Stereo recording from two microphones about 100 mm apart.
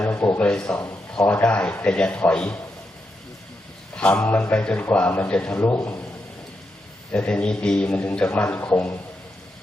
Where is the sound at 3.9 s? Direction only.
10° left (ahead or behind).